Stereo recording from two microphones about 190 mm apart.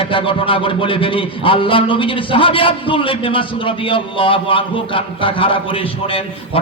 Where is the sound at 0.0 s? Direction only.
30° left (ahead or behind).